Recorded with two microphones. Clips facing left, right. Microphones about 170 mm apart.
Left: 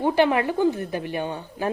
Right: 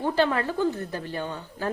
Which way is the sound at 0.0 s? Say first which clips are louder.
Left 4 dB; 15° left (ahead or behind).